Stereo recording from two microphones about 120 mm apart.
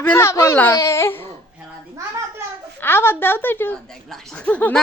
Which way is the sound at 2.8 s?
20° left (ahead or behind).